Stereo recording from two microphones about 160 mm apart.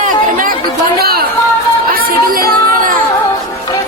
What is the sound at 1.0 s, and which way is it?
Chatter, 75° right (ahead or behind).